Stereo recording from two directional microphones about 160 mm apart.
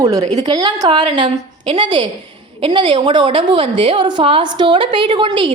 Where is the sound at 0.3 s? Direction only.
25° right (ahead or behind).